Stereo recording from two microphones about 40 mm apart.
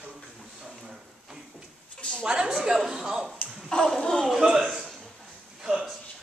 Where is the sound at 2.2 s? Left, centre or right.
Right.